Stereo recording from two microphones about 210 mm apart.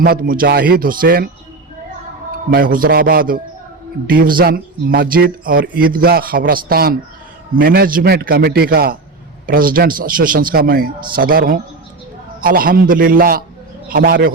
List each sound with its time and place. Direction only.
0.0 s speech: 40° right (ahead or behind)
2.5 s speech: 40° right (ahead or behind)